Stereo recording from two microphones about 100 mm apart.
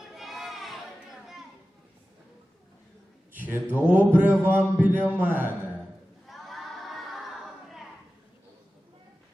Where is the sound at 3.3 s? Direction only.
20° right (ahead or behind).